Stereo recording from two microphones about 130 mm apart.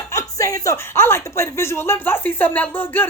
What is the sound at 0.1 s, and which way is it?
Speech, 25° left (ahead or behind).